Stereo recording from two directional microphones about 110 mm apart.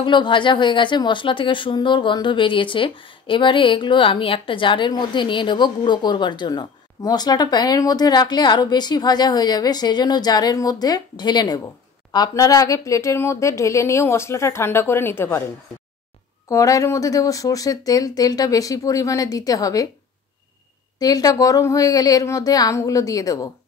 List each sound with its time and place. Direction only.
0.0 s a woman's voice: 45° left (ahead or behind); by 15.4 s 20° left (ahead or behind)
16.4 s speech: 30° left (ahead or behind)
21.0 s speech: 35° left (ahead or behind)